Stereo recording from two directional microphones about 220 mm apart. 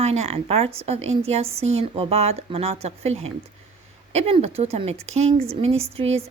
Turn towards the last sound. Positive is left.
turn(degrees=-30)  # may be behind; listen again after turning